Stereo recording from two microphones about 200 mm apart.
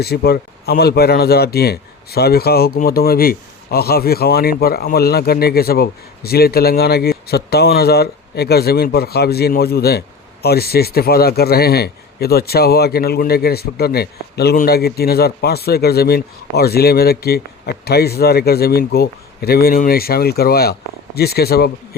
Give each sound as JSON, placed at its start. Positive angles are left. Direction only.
{"t": 0.0, "sound": "speech", "side_deg": 50}